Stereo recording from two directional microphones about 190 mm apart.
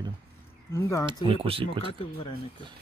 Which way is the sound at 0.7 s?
15° left (ahead or behind).